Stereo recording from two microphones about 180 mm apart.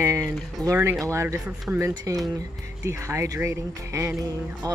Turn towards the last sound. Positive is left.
turn(degrees=-15)  # may be behind; listen again after turning